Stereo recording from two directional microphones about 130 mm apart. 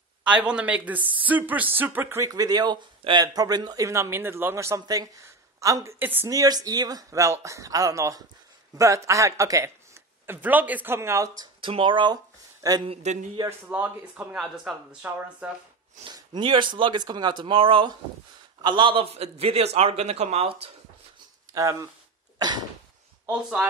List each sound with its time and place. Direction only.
0.3 s speech: 10° right (ahead or behind)
6.3 s speech: 30° right (ahead or behind)
11.6 s speech: 40° right (ahead or behind)
12.8 s speech: 55° right (ahead or behind)
13.5 s speech: 15° right (ahead or behind)
16.0 s a man's voice: 35° right (ahead or behind)
21.5 s speech: 25° right (ahead or behind)